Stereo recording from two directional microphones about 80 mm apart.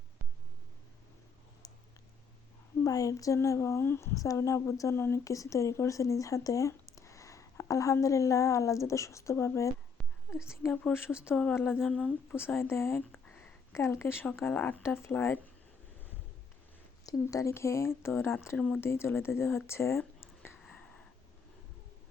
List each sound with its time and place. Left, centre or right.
1.6 s a sound: left
2.8 s a woman's voice: left
10.9 s speech: centre
11.5 s humming: left
12.5 s speech: left
13.0 s a sound: left
14.5 s humming: left
14.8 s speech: left
15.1 s humming: left
17.1 s speech: left
17.5 s speech: left
18.5 s speech: centre
18.8 s speech: left
20.6 s a sound: centre